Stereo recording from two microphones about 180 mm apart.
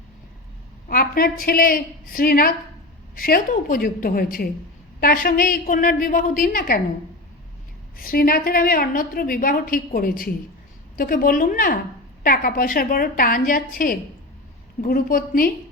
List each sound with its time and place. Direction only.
0.9 s a woman's voice: 55° left (ahead or behind)
7.9 s a woman's voice: 55° left (ahead or behind)